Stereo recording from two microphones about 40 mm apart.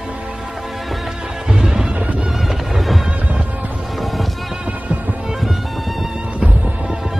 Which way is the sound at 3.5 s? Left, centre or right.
Right.